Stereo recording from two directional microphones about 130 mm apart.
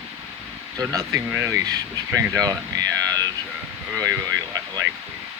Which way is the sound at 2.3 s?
30° right (ahead or behind).